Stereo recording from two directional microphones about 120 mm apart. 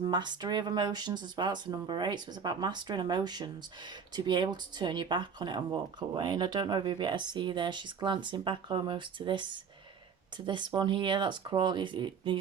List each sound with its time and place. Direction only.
0.0 s speech: 40° right (ahead or behind)